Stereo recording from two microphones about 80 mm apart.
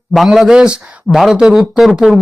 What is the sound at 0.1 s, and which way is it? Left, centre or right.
Speech, centre.